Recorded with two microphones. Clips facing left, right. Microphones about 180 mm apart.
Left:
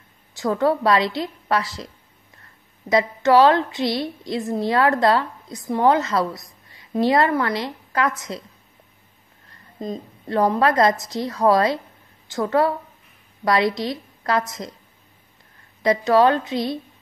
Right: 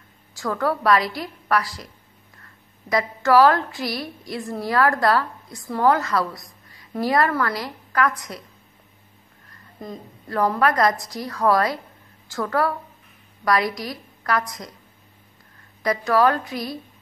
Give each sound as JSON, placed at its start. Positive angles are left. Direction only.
{"t": 0.4, "sound": "a woman's voice", "side_deg": 20}
{"t": 2.9, "sound": "a woman's voice", "side_deg": 20}
{"t": 9.8, "sound": "a woman's voice", "side_deg": 20}
{"t": 15.8, "sound": "a woman's voice", "side_deg": 25}